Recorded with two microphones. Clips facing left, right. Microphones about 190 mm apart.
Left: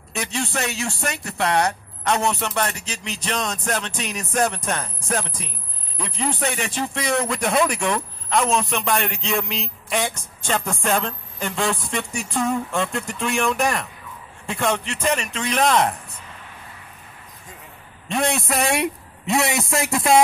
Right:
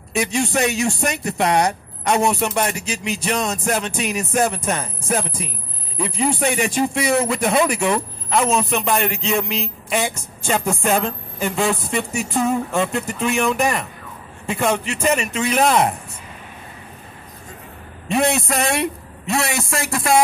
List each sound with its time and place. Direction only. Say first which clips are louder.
0.1 s a man's voice: right 6 dB; 10° right (ahead or behind)
18.0 s speech: right 4 dB; 5° right (ahead or behind)
18.6 s a man's voice: right 1 dB; 15° left (ahead or behind)